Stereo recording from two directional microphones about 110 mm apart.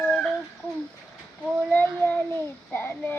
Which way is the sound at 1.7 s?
15° left (ahead or behind).